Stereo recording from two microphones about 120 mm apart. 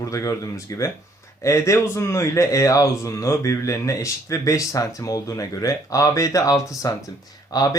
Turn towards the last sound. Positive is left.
turn(degrees=30)  # may be behind; listen again after turning